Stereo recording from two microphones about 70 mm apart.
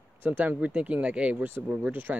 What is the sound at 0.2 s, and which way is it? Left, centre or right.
Speech, right.